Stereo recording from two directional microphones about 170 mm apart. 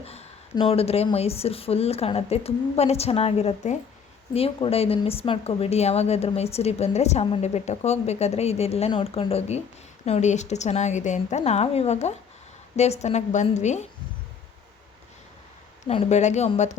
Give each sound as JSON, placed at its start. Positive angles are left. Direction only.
{"t": 0.0, "sound": "a sound", "side_deg": 40}
{"t": 0.5, "sound": "a woman's voice", "side_deg": 35}
{"t": 15.9, "sound": "a woman's voice", "side_deg": 40}